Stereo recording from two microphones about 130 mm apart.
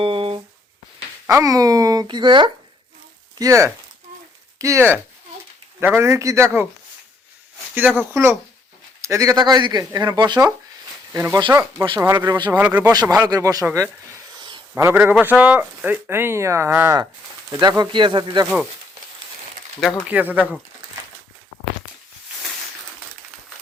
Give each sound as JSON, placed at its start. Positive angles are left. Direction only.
{"t": 0.0, "sound": "a sound", "side_deg": -45}
{"t": 1.3, "sound": "speech", "side_deg": -25}
{"t": 3.3, "sound": "speech", "side_deg": -25}
{"t": 7.8, "sound": "speech", "side_deg": -15}
{"t": 11.1, "sound": "speech", "side_deg": -20}
{"t": 11.3, "sound": "speech", "side_deg": -35}
{"t": 11.9, "sound": "speech", "side_deg": -20}
{"t": 12.5, "sound": "speech", "side_deg": -15}
{"t": 12.9, "sound": "speech", "side_deg": -30}
{"t": 14.3, "sound": "a sound", "side_deg": -35}
{"t": 14.8, "sound": "speech", "side_deg": -20}
{"t": 20.1, "sound": "speech", "side_deg": -10}